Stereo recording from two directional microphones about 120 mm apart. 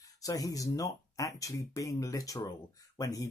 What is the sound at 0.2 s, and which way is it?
Speech, 30° left (ahead or behind).